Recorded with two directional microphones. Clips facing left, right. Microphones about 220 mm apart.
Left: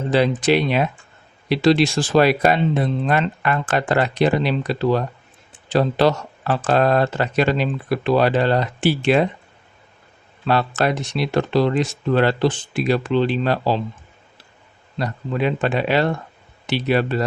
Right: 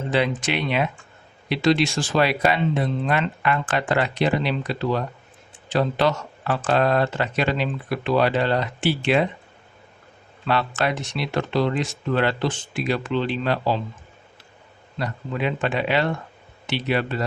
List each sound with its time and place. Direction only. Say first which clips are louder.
0.1 s speech: left 6 dB; 35° left (ahead or behind)
10.4 s speech: left 4 dB; 40° left (ahead or behind)
14.9 s speech: left 4 dB; 35° left (ahead or behind)